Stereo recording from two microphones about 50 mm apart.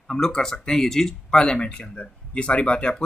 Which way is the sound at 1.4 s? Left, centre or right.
Centre.